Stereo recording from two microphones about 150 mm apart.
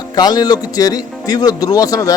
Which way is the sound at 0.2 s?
25° left (ahead or behind).